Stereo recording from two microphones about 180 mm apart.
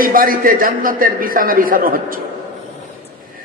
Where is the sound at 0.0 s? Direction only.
50° right (ahead or behind).